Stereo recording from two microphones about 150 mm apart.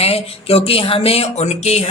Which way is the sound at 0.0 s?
40° left (ahead or behind).